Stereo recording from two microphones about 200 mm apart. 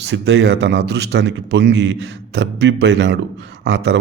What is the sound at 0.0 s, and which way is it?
A man's voice, 60° right (ahead or behind).